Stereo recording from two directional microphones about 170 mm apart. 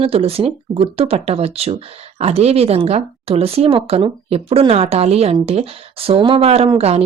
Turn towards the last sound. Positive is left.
turn(degrees=-35)  # may be behind; listen again after turning